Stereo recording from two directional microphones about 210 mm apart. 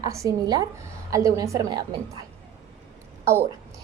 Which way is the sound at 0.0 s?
15° right (ahead or behind).